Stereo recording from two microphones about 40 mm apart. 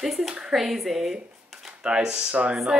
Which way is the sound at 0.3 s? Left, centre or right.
Right.